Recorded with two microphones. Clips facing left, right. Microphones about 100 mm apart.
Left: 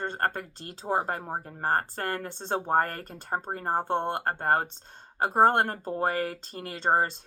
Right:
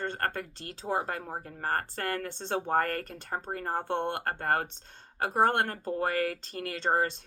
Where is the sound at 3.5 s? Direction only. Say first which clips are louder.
Left 3 dB; 35° left (ahead or behind).